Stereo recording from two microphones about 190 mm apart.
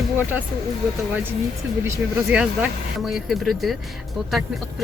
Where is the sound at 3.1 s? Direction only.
Centre (ahead or behind).